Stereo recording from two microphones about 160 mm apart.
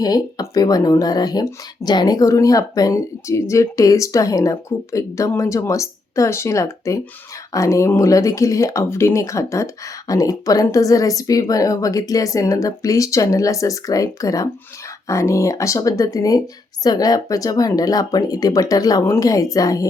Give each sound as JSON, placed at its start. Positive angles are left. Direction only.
{"t": 0.0, "sound": "speech", "side_deg": 25}